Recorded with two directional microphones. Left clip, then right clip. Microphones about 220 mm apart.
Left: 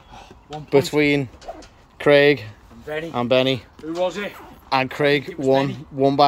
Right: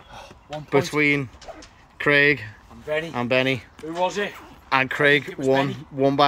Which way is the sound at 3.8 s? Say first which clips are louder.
Even; 40° right (ahead or behind).